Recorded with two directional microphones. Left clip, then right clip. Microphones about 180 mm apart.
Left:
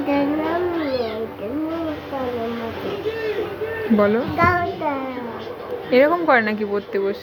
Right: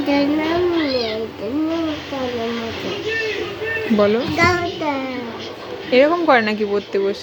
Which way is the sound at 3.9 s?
15° right (ahead or behind).